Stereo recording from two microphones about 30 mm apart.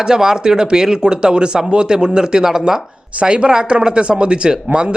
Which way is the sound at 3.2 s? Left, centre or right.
Right.